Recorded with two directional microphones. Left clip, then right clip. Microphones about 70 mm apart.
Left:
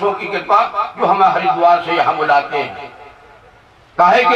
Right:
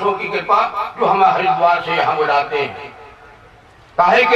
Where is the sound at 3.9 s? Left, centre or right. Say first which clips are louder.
Left 2 dB; left.